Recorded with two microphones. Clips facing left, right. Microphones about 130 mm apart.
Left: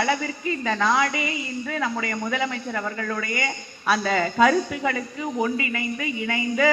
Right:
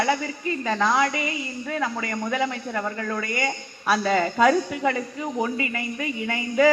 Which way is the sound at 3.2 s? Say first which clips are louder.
Right 1 dB; 35° right (ahead or behind).